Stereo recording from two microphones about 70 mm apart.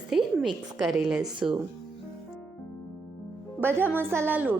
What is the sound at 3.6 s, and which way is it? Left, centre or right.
Speech, right.